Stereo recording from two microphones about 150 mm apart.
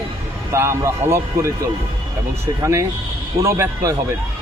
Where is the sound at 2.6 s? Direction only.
20° right (ahead or behind).